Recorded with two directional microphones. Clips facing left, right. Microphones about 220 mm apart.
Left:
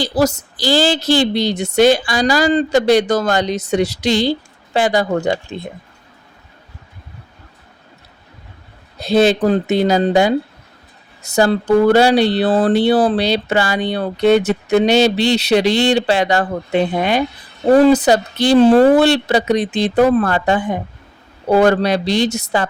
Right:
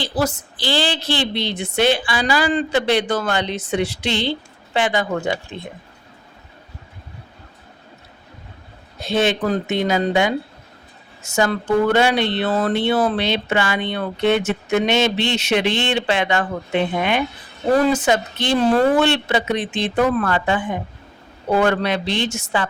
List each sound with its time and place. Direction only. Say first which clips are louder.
0.0 s speech: left 6 dB; 40° left (ahead or behind)
9.0 s speech: left 6 dB; 35° left (ahead or behind)